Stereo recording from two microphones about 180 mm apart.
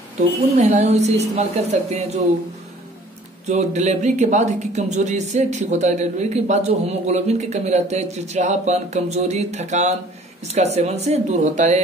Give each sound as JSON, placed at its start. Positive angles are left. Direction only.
{"t": 0.6, "sound": "speech", "side_deg": -40}
{"t": 3.4, "sound": "speech", "side_deg": -40}